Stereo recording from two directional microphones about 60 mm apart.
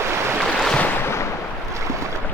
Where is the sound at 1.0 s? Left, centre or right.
Left.